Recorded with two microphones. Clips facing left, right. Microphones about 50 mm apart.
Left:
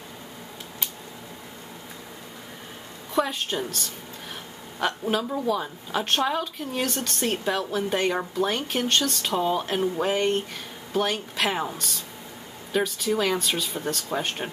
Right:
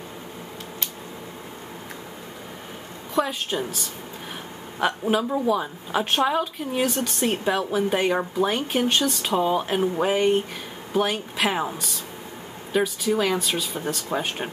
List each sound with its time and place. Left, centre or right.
3.2 s speech: centre